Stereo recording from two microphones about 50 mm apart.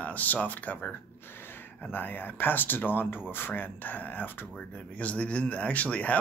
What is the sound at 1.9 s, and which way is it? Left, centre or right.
Speech, left.